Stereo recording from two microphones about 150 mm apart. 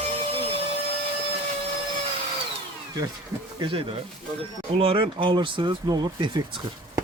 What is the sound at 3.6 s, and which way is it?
Speech, 35° right (ahead or behind).